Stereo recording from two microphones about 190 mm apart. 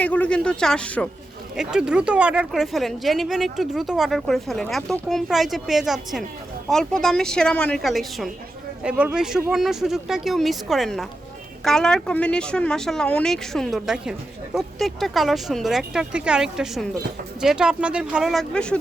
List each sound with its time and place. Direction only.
0.0 s speech: 5° left (ahead or behind)
1.5 s speech: 5° right (ahead or behind)